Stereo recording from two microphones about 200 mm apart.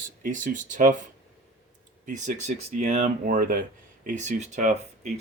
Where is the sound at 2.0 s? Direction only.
40° right (ahead or behind).